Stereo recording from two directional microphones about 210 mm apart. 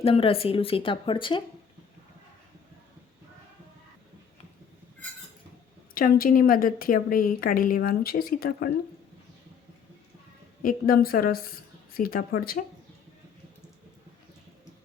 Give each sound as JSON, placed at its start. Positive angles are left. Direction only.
{"t": 0.0, "sound": "speech", "side_deg": 25}
{"t": 5.9, "sound": "a woman's voice", "side_deg": 40}
{"t": 10.6, "sound": "a woman's voice", "side_deg": 45}